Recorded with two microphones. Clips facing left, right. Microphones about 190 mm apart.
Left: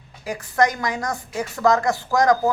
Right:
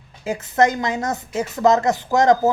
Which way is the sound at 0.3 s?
20° right (ahead or behind).